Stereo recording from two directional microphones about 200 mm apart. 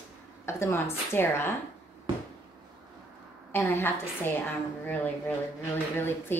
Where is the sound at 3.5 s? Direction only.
10° left (ahead or behind).